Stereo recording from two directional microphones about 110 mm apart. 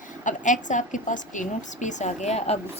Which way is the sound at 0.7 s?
90° left.